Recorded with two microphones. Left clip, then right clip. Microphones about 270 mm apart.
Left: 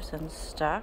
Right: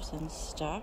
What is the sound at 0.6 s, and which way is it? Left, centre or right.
Speech, centre.